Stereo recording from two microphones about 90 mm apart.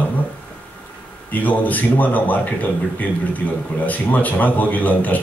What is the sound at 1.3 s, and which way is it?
A man's voice, 20° left (ahead or behind).